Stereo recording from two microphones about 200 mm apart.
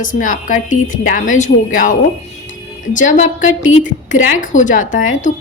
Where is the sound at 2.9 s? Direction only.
40° left (ahead or behind).